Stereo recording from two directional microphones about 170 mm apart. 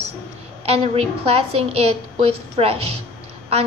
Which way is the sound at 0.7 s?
35° right (ahead or behind).